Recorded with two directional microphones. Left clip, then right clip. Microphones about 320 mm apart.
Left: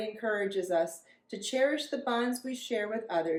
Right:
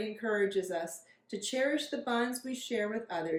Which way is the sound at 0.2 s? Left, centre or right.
Centre.